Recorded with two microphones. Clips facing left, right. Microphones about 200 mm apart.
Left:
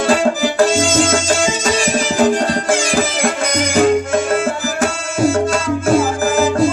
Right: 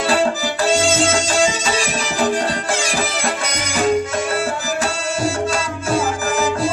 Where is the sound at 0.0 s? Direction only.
45° left (ahead or behind).